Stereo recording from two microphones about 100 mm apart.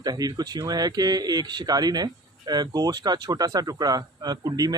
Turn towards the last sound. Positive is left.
turn(degrees=-40)  # may be behind; listen again after turning